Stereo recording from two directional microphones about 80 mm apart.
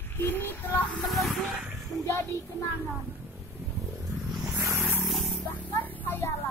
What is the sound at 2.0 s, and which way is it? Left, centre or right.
Speech, left.